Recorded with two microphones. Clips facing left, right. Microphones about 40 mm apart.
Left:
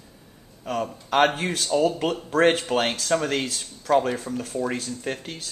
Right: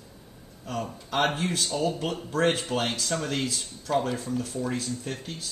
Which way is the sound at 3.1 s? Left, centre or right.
Left.